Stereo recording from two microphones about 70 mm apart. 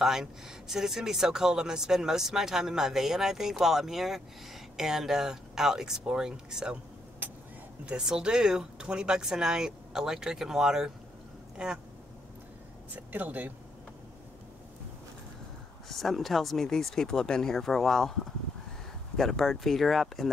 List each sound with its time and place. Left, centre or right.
0.0 s speech: centre
7.8 s speech: centre
12.9 s speech: right
15.9 s speech: centre
19.1 s speech: centre